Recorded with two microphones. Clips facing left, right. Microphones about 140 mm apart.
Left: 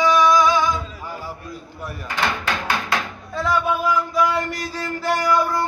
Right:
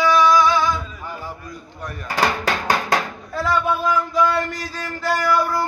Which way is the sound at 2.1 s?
35° right (ahead or behind).